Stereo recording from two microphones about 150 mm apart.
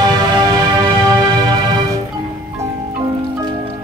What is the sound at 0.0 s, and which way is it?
Music, 30° right (ahead or behind).